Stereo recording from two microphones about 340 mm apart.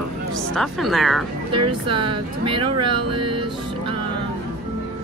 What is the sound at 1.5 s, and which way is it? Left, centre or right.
Speech, centre.